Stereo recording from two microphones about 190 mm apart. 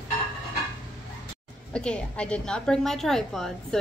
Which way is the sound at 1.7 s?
5° left (ahead or behind).